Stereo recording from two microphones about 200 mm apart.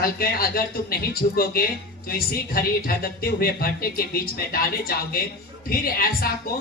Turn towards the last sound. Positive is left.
turn(degrees=45)  # may be behind; listen again after turning